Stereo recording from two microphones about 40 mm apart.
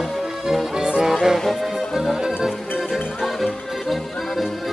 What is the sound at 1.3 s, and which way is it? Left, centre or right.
Music, centre.